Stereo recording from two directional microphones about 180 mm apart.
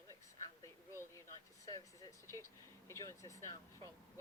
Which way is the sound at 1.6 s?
20° left (ahead or behind).